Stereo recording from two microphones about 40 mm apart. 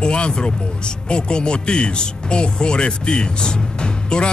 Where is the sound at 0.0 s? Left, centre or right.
Left.